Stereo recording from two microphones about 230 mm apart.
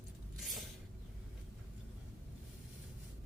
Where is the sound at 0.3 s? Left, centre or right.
Centre.